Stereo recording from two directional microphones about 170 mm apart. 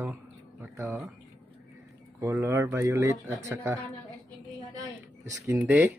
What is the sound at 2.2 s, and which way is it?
Speech, 15° right (ahead or behind).